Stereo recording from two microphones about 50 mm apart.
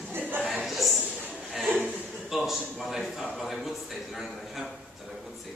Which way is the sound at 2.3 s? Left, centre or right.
Centre.